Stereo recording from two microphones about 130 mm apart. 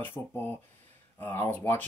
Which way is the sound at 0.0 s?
15° left (ahead or behind).